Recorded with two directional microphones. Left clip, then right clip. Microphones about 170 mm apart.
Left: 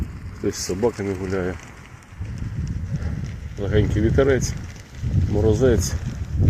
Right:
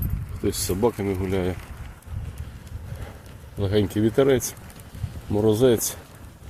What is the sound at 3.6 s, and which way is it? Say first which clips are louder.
Speech: even; 20° right (ahead or behind).